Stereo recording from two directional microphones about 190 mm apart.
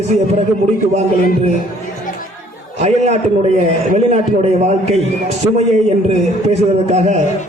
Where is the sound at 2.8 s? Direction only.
35° right (ahead or behind).